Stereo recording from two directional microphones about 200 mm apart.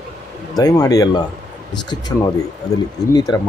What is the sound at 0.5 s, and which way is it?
Speech, 20° left (ahead or behind).